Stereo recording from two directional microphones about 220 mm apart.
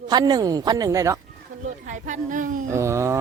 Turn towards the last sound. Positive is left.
turn(degrees=-15)  # may be behind; listen again after turning